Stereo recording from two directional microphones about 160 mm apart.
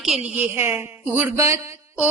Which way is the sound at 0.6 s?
15° right (ahead or behind).